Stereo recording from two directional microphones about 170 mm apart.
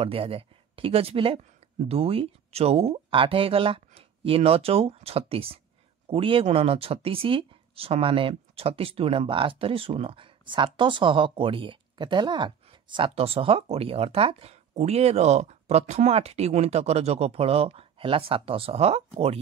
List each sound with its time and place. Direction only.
0.0 s speech: 35° right (ahead or behind)